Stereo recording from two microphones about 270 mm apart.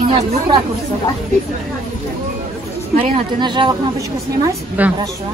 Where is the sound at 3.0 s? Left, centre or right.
Centre.